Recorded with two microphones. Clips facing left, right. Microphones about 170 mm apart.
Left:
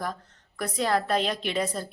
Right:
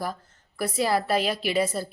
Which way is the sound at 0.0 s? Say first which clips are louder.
Right 1 dB; 5° right (ahead or behind).